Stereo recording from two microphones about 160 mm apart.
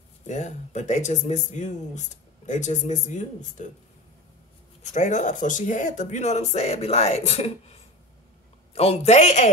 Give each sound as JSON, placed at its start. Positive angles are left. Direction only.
{"t": 0.3, "sound": "speech", "side_deg": 45}
{"t": 4.9, "sound": "speech", "side_deg": 50}